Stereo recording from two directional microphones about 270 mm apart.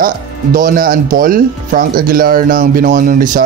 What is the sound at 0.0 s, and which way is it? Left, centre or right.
Speech, right.